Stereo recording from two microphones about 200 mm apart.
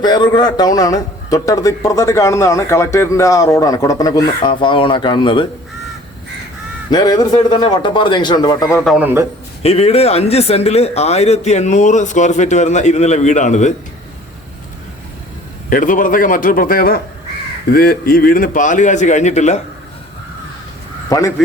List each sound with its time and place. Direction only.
0.0 s a man's voice: 20° left (ahead or behind)
6.9 s speech: 20° left (ahead or behind)
8.8 s a man's voice: 5° right (ahead or behind)
9.6 s speech: 30° left (ahead or behind)
15.7 s a man's voice: 40° left (ahead or behind)
21.1 s a man's voice: 15° left (ahead or behind)